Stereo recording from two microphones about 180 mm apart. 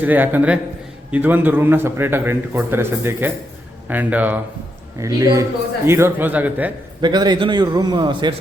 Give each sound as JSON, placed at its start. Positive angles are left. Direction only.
{"t": 0.0, "sound": "a man's voice", "side_deg": -10}
{"t": 7.0, "sound": "a man's voice", "side_deg": -25}